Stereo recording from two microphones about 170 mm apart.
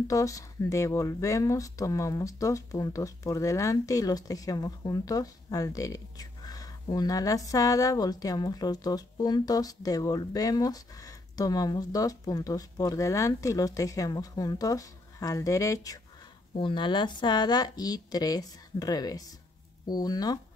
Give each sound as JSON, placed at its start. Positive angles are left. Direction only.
{"t": 0.1, "sound": "speech", "side_deg": 20}